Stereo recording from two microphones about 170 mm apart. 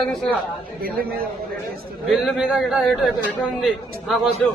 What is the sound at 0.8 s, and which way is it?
Speech, 60° right (ahead or behind).